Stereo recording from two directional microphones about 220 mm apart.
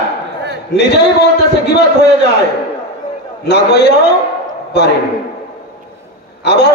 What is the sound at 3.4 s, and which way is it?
Speech, 50° left (ahead or behind).